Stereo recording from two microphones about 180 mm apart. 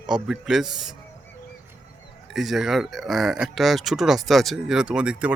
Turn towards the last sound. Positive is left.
turn(degrees=-5)  # may be behind; listen again after turning